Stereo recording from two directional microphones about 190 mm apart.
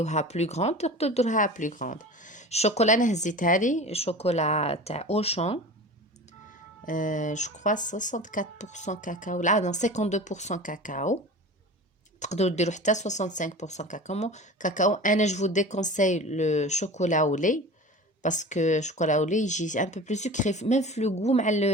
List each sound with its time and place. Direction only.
0.0 s speech: 35° left (ahead or behind)
6.8 s speech: 45° left (ahead or behind)
12.2 s speech: 35° left (ahead or behind)